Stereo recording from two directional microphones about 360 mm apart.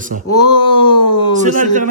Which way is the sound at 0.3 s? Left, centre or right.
Centre.